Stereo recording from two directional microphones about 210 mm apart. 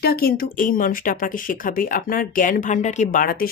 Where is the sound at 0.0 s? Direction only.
50° left (ahead or behind).